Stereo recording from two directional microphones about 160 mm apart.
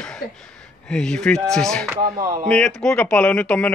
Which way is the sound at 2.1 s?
20° right (ahead or behind).